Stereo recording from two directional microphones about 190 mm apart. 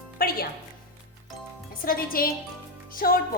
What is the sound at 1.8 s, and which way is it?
Speech, 50° left (ahead or behind).